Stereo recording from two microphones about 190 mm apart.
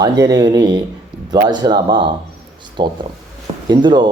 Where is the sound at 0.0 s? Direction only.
20° right (ahead or behind).